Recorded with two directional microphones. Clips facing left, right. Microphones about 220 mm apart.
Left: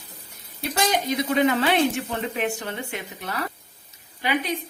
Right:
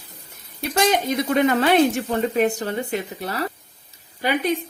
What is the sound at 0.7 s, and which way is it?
A woman's voice, 55° right (ahead or behind).